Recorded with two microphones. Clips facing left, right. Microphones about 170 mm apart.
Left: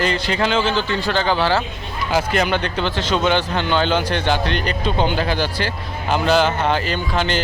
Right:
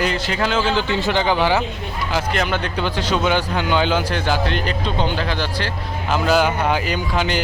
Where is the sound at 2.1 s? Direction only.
Centre (ahead or behind).